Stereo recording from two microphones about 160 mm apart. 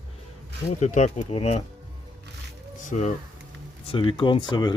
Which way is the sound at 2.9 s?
45° left (ahead or behind).